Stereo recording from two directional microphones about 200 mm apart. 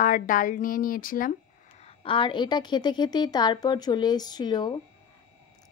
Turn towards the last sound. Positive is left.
turn(degrees=20)  # may be behind; listen again after turning